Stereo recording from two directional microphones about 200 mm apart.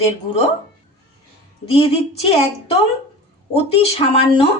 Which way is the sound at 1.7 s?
30° left (ahead or behind).